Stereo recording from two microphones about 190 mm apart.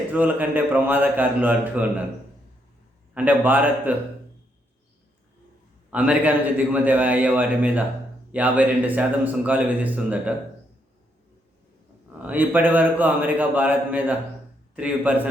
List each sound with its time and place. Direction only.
0.1 s speech: 10° right (ahead or behind)
3.2 s speech: 10° right (ahead or behind)
5.9 s speech: 10° right (ahead or behind)
12.2 s speech: 10° right (ahead or behind)